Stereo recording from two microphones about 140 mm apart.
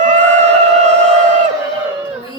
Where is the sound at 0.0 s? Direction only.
60° right (ahead or behind).